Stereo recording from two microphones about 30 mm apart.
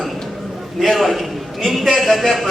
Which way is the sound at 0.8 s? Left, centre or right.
Centre.